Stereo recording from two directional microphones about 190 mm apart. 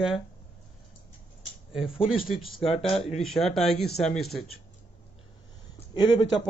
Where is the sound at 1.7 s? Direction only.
Centre (ahead or behind).